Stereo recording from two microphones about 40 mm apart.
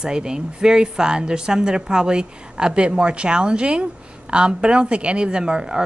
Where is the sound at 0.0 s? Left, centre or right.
Centre.